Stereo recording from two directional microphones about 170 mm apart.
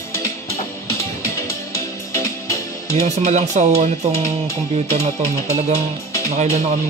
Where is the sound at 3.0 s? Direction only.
40° right (ahead or behind).